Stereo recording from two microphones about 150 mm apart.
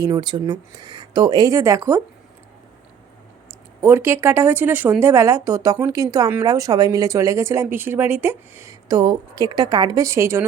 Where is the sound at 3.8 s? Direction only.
15° right (ahead or behind).